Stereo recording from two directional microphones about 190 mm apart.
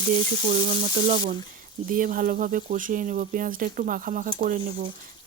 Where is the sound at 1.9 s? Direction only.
45° right (ahead or behind).